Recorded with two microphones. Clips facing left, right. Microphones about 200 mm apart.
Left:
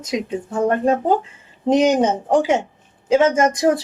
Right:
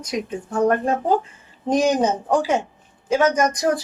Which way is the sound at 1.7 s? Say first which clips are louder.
Left 3 dB; 25° left (ahead or behind).